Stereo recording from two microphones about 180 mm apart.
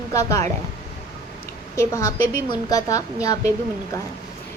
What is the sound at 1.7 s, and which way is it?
A woman's voice, 15° left (ahead or behind).